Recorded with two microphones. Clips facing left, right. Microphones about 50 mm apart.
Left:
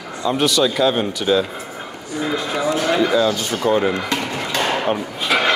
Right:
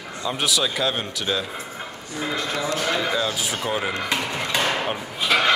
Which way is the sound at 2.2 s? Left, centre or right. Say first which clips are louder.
Left 4 dB; centre.